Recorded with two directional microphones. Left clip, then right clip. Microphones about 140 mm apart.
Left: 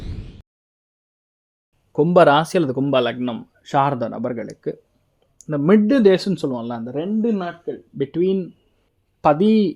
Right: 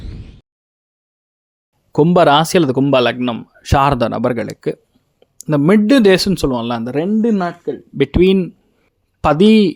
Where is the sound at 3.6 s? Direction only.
35° right (ahead or behind).